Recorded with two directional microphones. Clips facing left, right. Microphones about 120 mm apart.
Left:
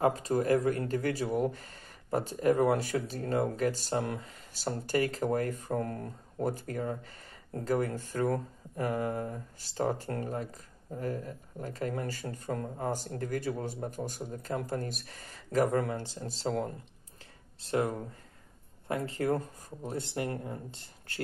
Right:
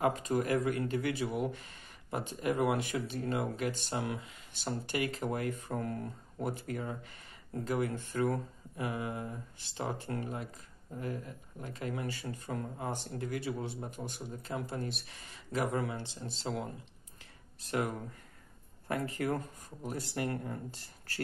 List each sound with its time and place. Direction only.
0.0 s speech: 35° left (ahead or behind)
17.6 s speech: 30° left (ahead or behind)